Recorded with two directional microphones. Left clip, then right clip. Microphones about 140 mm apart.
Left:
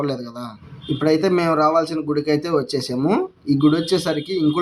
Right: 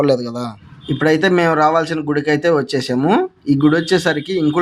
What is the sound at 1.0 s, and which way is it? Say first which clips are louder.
Speech: right 4 dB; 20° right (ahead or behind).